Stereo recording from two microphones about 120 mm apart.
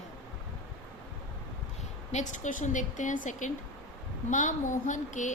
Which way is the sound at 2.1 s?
85° left.